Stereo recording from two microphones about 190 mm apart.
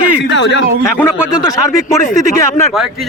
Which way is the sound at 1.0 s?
10° left (ahead or behind).